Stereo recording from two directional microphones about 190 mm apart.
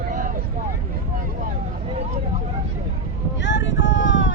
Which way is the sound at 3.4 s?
70° left (ahead or behind).